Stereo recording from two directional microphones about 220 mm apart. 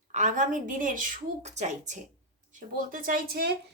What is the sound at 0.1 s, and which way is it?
A woman's voice, 35° right (ahead or behind).